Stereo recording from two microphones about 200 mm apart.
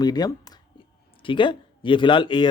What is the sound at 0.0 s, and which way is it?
Speech, 20° left (ahead or behind).